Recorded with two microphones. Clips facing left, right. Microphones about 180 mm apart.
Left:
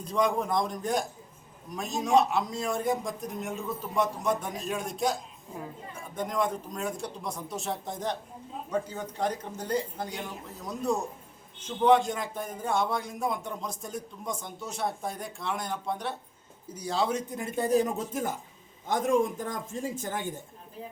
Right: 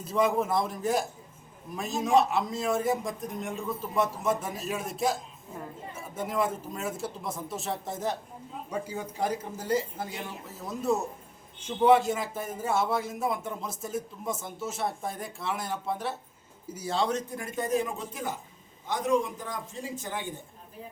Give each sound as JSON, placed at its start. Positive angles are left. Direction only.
{"t": 0.0, "sound": "a man's voice", "side_deg": -5}